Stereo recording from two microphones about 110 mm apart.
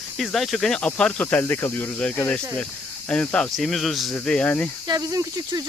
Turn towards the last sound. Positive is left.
turn(degrees=-30)  # may be behind; listen again after turning